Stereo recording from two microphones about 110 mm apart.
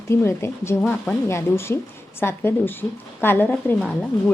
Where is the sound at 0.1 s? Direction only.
25° left (ahead or behind).